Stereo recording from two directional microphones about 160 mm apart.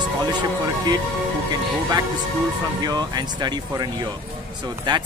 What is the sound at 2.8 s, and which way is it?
Speech, 25° right (ahead or behind).